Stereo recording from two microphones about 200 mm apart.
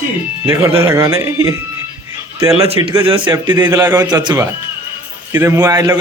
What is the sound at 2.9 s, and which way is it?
A man's voice, 20° right (ahead or behind).